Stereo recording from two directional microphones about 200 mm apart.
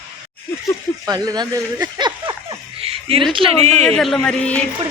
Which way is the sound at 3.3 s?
30° right (ahead or behind).